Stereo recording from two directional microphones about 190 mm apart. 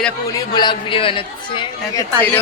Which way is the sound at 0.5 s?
25° left (ahead or behind).